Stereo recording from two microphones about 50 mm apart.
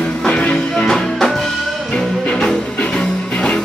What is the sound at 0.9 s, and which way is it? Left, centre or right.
Music, centre.